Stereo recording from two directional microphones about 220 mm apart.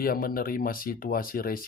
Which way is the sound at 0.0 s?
40° left (ahead or behind).